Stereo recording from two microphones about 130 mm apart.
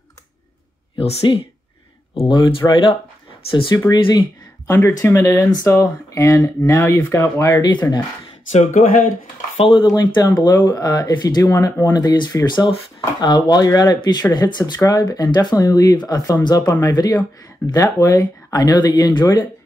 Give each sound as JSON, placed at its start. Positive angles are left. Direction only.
{"t": 0.9, "sound": "speech", "side_deg": 50}
{"t": 4.6, "sound": "speech", "side_deg": 15}
{"t": 7.6, "sound": "speech", "side_deg": 35}
{"t": 8.5, "sound": "speech", "side_deg": 70}
{"t": 9.6, "sound": "speech", "side_deg": 35}